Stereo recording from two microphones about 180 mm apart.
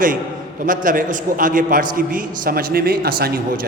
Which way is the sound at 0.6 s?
50° right (ahead or behind).